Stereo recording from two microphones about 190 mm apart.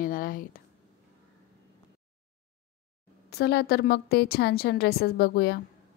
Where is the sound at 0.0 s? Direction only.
50° left (ahead or behind).